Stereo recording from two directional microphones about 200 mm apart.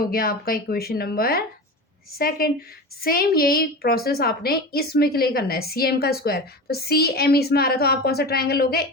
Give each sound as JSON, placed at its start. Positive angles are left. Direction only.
{"t": 0.0, "sound": "a woman's voice", "side_deg": 50}